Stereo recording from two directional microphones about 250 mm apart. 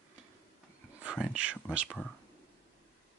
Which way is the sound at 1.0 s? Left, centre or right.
Centre.